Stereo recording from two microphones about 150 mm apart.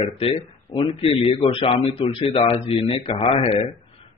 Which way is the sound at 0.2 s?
40° left (ahead or behind).